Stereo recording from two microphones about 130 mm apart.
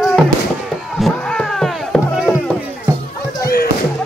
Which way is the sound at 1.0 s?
5° left (ahead or behind).